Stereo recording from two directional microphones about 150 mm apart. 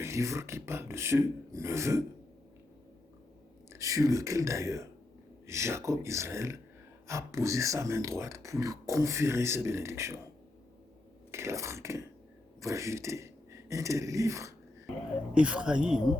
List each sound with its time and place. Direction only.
0.0 s speech: 20° right (ahead or behind)
3.7 s speech: 20° right (ahead or behind)
11.3 s speech: 20° right (ahead or behind)
15.4 s speech: 5° right (ahead or behind)